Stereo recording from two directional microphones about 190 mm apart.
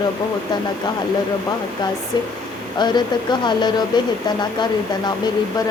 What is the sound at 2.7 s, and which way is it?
Speech, 25° left (ahead or behind).